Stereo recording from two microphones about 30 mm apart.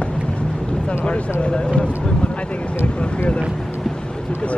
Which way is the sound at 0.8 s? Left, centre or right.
Left.